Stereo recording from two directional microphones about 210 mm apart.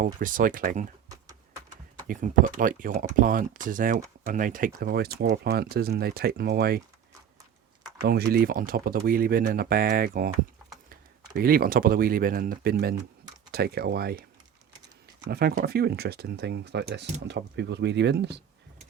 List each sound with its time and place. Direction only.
0.0 s speech: 40° right (ahead or behind)
2.0 s speech: 40° right (ahead or behind)
8.0 s speech: 50° right (ahead or behind)
11.3 s speech: 45° right (ahead or behind)
15.3 s speech: 50° right (ahead or behind)